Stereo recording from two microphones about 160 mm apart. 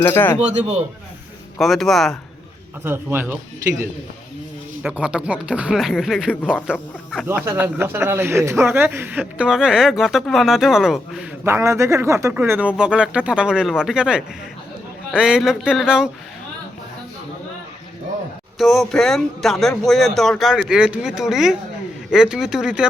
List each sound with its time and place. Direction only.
0.1 s speech: 15° left (ahead or behind)
0.3 s speech: 45° right (ahead or behind)
1.5 s speech: centre (ahead or behind)
2.8 s a man's voice: 15° right (ahead or behind)
4.8 s a man's voice: 5° right (ahead or behind)
11.4 s a man's voice: 15° right (ahead or behind)
18.6 s speech: centre (ahead or behind)